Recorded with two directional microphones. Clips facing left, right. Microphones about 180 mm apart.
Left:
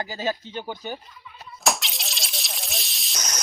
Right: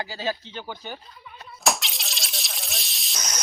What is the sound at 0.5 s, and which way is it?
Speech, 15° left (ahead or behind).